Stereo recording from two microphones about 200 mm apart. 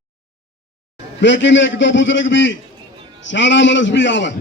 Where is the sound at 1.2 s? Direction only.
65° left (ahead or behind).